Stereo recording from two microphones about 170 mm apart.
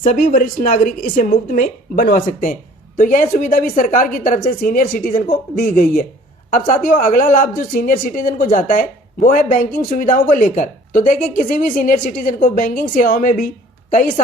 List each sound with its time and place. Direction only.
0.0 s a woman's voice: 50° left (ahead or behind)